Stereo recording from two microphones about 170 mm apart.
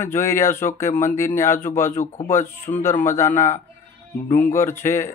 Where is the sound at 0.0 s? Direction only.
15° left (ahead or behind).